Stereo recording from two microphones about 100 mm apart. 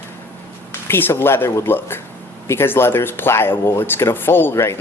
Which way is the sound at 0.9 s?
20° left (ahead or behind).